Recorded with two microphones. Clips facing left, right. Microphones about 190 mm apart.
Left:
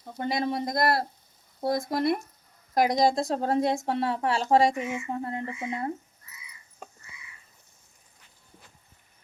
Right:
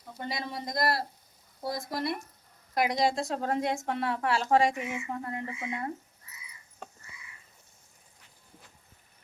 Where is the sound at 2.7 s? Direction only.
40° left (ahead or behind).